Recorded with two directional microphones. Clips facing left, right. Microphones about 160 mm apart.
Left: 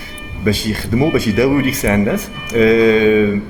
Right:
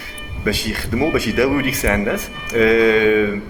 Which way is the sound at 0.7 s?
20° left (ahead or behind).